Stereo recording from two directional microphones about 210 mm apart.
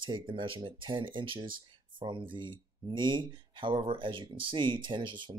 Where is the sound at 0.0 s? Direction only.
25° right (ahead or behind).